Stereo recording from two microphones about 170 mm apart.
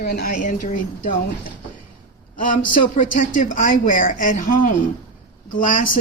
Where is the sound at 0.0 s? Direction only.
65° left (ahead or behind).